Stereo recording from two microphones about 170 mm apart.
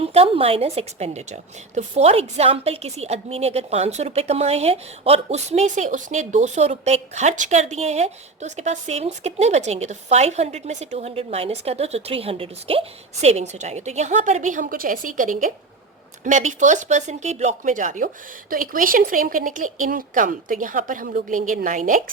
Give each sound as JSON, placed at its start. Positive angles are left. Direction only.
{"t": 0.0, "sound": "a woman's voice", "side_deg": -35}